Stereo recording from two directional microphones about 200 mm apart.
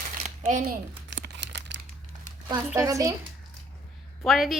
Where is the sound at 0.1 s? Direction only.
35° right (ahead or behind).